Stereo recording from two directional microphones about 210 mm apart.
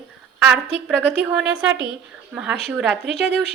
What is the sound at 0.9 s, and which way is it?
Speech, 5° right (ahead or behind).